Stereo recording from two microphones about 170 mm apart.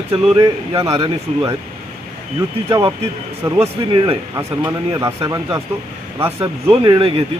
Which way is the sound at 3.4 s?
15° right (ahead or behind).